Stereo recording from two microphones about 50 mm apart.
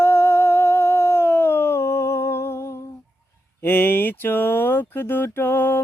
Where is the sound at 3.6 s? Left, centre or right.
Left.